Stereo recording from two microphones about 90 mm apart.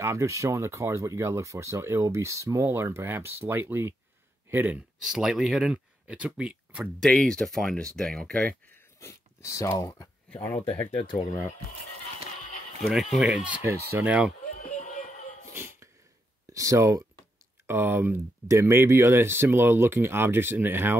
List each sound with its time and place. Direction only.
0.0 s speech: 30° right (ahead or behind)
5.0 s speech: 5° right (ahead or behind)
7.1 s speech: 10° left (ahead or behind)
9.0 s speech: 35° left (ahead or behind)
10.3 s speech: 20° left (ahead or behind)
12.8 s speech: centre (ahead or behind)
13.3 s speech: 15° right (ahead or behind)
13.7 s speech: 25° right (ahead or behind)
15.5 s sneeze: 30° right (ahead or behind)
16.5 s speech: 35° right (ahead or behind)